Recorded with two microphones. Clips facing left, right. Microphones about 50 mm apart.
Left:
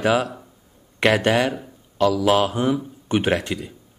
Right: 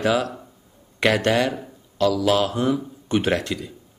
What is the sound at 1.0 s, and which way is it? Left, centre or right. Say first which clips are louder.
Speech: left 1 dB; centre.